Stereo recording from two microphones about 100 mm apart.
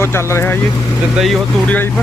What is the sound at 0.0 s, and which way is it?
Speech, 25° left (ahead or behind).